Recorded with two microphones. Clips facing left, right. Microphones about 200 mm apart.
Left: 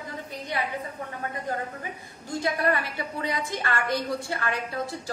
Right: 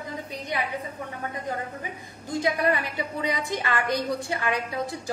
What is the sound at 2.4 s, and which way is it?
A woman's voice, 15° right (ahead or behind).